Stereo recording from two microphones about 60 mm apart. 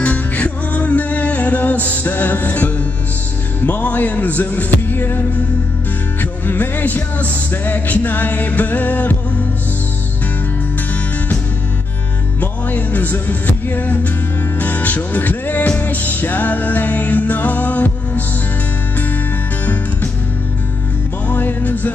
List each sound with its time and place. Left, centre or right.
0.0 s music: left
6.4 s music: left
12.4 s music: left
19.6 s music: left
21.3 s music: left